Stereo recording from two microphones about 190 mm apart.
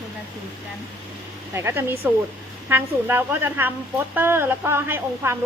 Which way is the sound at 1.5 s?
15° right (ahead or behind).